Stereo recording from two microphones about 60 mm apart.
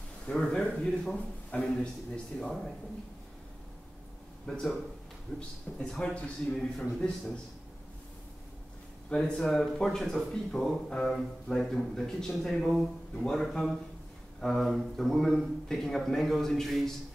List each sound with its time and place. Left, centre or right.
0.3 s a man's voice: centre
1.5 s a man's voice: left
4.5 s a man's voice: centre
5.3 s a man's voice: centre
9.1 s a man's voice: centre